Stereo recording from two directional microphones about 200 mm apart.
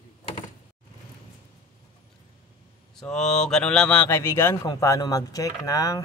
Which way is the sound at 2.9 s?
5° left (ahead or behind).